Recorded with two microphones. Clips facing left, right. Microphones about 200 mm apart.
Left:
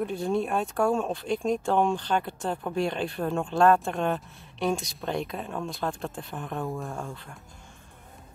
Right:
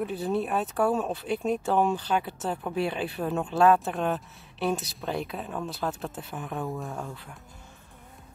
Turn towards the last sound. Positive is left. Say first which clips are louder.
# even
turn(degrees=-5)  # may be behind; listen again after turning